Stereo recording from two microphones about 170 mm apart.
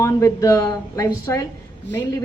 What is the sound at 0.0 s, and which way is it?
A woman's voice, 20° left (ahead or behind).